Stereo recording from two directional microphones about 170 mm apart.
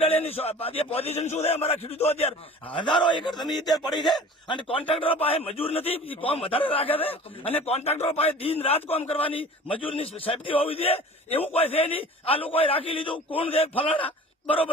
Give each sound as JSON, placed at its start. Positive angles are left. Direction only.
{"t": 0.0, "sound": "a man's voice", "side_deg": 35}
{"t": 3.7, "sound": "speech", "side_deg": 0}
{"t": 4.4, "sound": "a man's voice", "side_deg": 30}